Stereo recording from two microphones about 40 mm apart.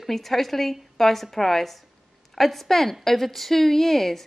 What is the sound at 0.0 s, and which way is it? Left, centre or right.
A woman's voice, centre.